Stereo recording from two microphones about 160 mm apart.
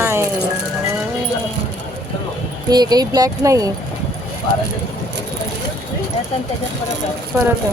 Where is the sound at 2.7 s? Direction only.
25° right (ahead or behind).